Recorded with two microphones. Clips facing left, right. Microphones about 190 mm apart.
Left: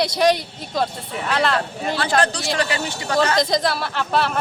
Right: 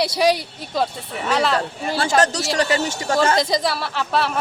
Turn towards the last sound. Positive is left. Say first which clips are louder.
# even
turn(degrees=0)  # may be behind; listen again after turning